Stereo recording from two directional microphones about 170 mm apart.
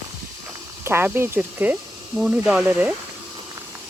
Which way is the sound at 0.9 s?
15° right (ahead or behind).